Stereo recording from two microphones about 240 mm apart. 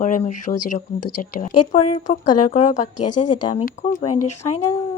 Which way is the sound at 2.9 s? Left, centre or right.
Left.